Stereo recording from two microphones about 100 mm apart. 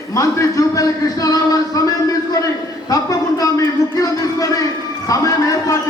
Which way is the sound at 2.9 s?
35° left (ahead or behind).